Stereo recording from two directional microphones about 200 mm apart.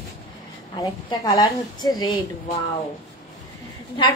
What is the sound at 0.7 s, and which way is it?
A woman's voice, 20° left (ahead or behind).